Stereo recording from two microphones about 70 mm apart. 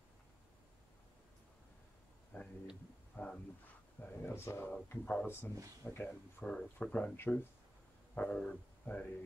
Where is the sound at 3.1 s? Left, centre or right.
Left.